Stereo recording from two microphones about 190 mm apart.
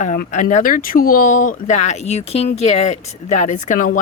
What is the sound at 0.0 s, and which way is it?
Speech, 40° left (ahead or behind).